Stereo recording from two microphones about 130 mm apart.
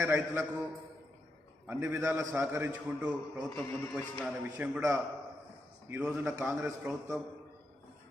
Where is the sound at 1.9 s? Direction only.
10° right (ahead or behind).